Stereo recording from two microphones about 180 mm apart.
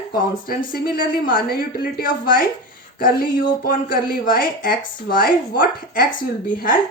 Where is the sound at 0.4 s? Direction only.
55° left (ahead or behind).